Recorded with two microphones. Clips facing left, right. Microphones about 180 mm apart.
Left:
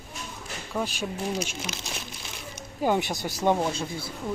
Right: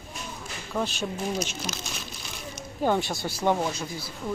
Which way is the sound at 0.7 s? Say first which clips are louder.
Right 1 dB; 10° left (ahead or behind).